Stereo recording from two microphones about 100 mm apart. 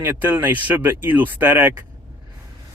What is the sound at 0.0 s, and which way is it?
Speech, 20° right (ahead or behind).